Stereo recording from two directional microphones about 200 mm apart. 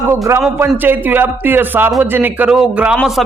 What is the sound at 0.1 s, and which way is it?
A man's voice, 10° right (ahead or behind).